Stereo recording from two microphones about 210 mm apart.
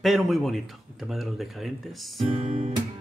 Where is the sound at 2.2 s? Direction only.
30° right (ahead or behind).